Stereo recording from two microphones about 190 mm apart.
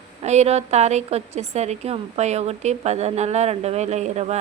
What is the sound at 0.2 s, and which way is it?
A woman's voice, 35° right (ahead or behind).